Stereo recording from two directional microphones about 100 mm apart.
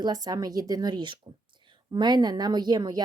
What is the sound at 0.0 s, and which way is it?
Speech, 40° right (ahead or behind).